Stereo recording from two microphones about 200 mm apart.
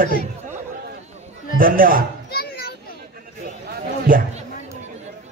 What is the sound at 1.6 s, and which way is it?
Speech, 45° right (ahead or behind).